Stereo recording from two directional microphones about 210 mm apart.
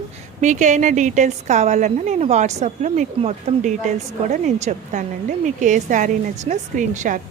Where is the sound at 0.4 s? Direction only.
35° right (ahead or behind).